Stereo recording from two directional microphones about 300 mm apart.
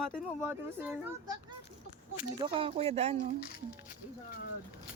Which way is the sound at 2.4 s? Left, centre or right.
Centre.